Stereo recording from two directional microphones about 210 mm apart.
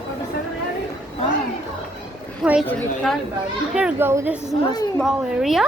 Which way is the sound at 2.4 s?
5° right (ahead or behind).